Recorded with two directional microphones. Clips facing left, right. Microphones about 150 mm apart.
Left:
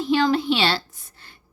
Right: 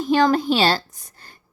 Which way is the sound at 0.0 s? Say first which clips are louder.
Right 2 dB; 45° right (ahead or behind).